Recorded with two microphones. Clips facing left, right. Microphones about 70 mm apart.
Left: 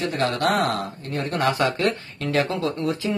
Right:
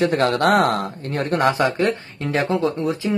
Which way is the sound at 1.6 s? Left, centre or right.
Centre.